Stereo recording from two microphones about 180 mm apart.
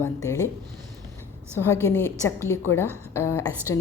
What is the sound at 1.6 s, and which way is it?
A woman's voice, 15° left (ahead or behind).